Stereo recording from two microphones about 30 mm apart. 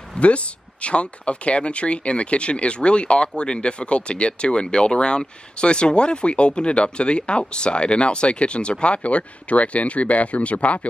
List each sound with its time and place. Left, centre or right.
0.2 s speech: left